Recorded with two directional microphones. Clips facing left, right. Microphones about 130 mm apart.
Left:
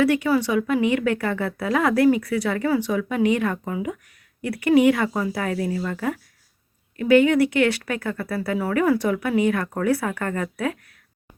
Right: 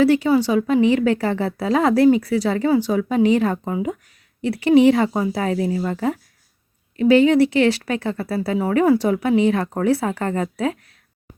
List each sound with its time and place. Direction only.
0.0 s speech: 30° right (ahead or behind)